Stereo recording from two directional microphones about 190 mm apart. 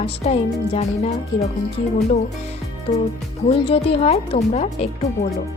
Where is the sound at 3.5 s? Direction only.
30° left (ahead or behind).